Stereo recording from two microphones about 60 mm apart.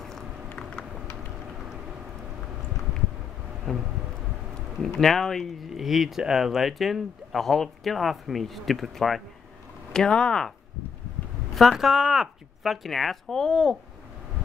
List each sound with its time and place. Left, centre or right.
0.6 s typing: centre
3.7 s vehicle: centre
4.8 s speech: centre
9.9 s speech: centre
11.5 s speech: centre